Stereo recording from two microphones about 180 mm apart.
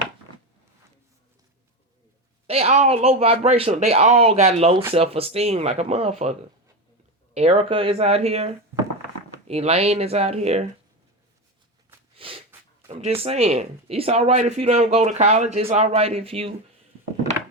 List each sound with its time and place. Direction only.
2.5 s speech: 35° right (ahead or behind)
7.3 s speech: 35° right (ahead or behind)
12.1 s snort: 30° right (ahead or behind)
12.9 s speech: 40° right (ahead or behind)